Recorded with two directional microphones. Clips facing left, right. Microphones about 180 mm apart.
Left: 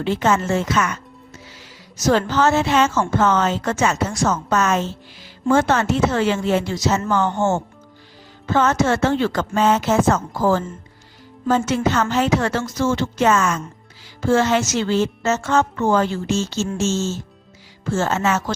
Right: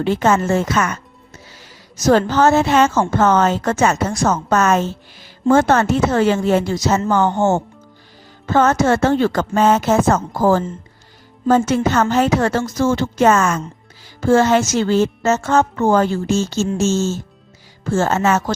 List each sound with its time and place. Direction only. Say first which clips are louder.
0.0 s a woman's voice: right 3 dB; 45° right (ahead or behind)
2.0 s a woman's voice: right 4 dB; 45° right (ahead or behind)
8.4 s a woman's voice: right 3 dB; 45° right (ahead or behind)